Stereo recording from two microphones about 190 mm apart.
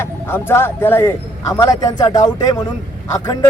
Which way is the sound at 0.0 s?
10° left (ahead or behind).